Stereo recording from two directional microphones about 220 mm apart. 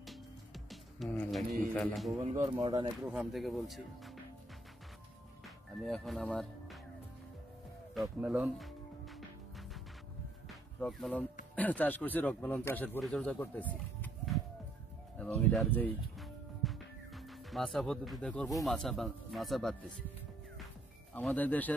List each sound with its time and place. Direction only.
0.7 s speech: centre (ahead or behind)
2.1 s speech: 30° right (ahead or behind)
3.1 s speech: centre (ahead or behind)
5.8 s speech: centre (ahead or behind)
7.9 s speech: 5° right (ahead or behind)
10.8 s speech: 5° left (ahead or behind)
21.1 s speech: 5° left (ahead or behind)